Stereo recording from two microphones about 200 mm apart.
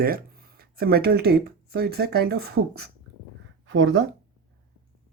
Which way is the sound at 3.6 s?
70° right (ahead or behind).